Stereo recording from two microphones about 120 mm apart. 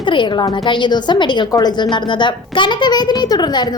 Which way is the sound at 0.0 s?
40° left (ahead or behind).